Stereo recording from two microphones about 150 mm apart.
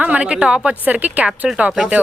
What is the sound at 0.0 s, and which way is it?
A woman's voice, 10° right (ahead or behind).